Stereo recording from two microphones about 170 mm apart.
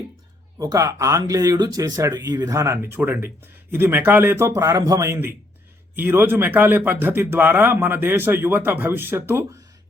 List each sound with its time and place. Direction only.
0.6 s speech: 20° right (ahead or behind)